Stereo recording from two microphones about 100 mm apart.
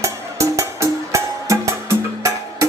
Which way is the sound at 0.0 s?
30° right (ahead or behind).